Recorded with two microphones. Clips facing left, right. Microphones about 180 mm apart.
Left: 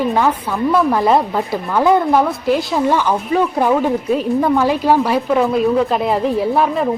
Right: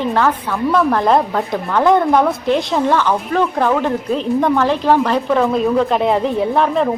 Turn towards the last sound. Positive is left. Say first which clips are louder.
# right 1 dB
turn(degrees=5)  # may be behind; listen again after turning